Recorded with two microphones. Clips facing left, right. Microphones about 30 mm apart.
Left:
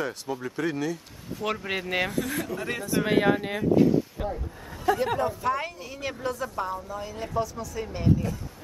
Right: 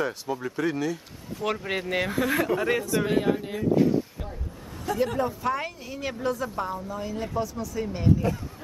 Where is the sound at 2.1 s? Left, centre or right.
Right.